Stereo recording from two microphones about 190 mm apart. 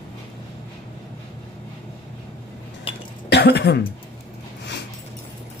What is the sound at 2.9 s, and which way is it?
Cough, 30° left (ahead or behind).